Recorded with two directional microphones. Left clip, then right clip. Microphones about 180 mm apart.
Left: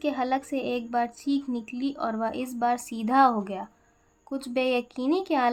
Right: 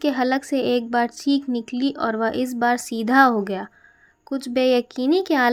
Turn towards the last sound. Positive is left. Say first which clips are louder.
# right 6 dB
turn(degrees=-30)  # may be behind; listen again after turning